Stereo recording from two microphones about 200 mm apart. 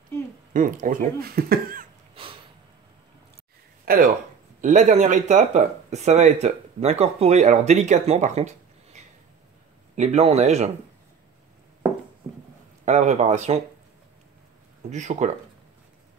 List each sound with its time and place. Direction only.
0.5 s speech: 40° right (ahead or behind)
2.2 s a sound: 25° right (ahead or behind)
3.8 s speech: 45° right (ahead or behind)
12.8 s speech: 35° right (ahead or behind)
14.9 s speech: 35° right (ahead or behind)